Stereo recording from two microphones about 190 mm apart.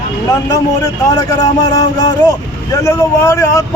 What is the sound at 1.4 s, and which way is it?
Speech, 20° left (ahead or behind).